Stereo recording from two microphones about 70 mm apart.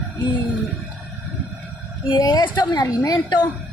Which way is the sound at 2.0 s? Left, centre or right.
Left.